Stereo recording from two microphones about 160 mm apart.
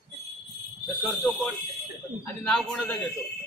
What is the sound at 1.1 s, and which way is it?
A man's voice, 10° left (ahead or behind).